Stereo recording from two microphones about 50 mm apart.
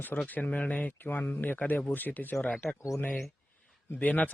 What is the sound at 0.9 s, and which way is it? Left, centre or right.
Speech, left.